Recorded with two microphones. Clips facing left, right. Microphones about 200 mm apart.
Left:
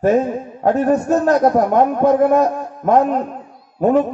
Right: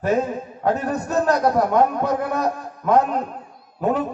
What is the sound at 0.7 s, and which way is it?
A man's voice, 45° left (ahead or behind).